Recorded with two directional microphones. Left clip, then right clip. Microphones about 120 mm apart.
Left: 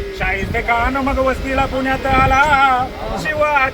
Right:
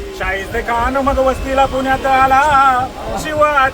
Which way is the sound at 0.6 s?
25° right (ahead or behind).